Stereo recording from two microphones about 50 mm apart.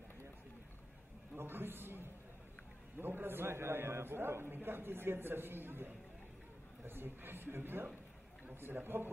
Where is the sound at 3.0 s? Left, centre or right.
Right.